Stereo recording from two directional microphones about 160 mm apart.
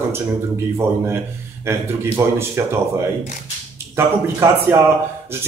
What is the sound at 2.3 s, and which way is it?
Speech, 15° right (ahead or behind).